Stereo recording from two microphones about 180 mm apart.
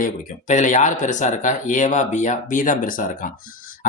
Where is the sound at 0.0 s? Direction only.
40° left (ahead or behind).